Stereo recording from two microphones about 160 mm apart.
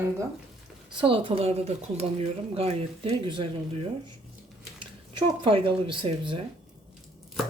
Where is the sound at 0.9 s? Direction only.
35° right (ahead or behind).